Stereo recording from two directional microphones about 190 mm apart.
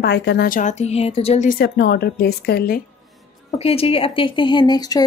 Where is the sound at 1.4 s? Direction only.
55° left (ahead or behind).